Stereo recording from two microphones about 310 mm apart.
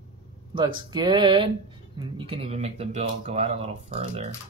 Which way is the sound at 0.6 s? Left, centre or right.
Centre.